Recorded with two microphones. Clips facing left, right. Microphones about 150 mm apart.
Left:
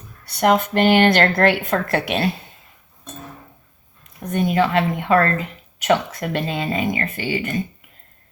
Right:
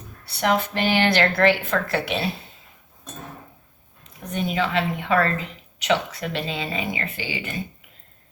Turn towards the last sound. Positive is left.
turn(degrees=50)  # may be behind; listen again after turning